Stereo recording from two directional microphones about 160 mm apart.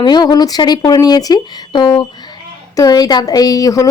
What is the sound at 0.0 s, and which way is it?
Speech, 25° left (ahead or behind).